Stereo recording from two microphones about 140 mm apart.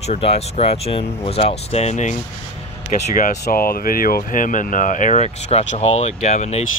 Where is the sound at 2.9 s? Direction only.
75° left (ahead or behind).